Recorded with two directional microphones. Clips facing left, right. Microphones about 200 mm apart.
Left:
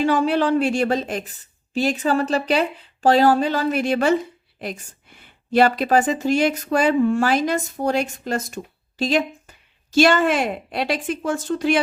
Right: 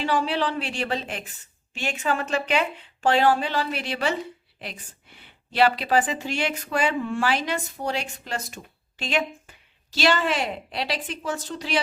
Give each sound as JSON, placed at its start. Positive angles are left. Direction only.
{"t": 0.0, "sound": "a woman's voice", "side_deg": 45}